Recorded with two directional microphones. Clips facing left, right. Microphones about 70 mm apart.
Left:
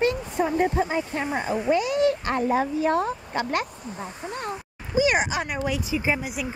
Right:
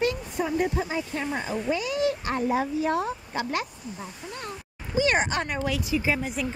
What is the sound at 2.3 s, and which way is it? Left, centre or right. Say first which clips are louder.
Speech: left 2 dB; left.